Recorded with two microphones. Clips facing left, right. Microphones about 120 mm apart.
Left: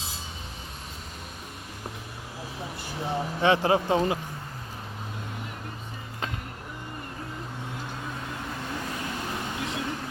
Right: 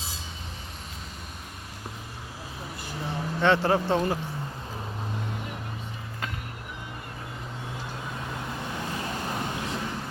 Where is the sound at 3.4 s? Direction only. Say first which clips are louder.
Even; 15° left (ahead or behind).